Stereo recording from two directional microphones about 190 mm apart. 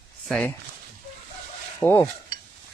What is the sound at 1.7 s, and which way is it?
Stir, 15° left (ahead or behind).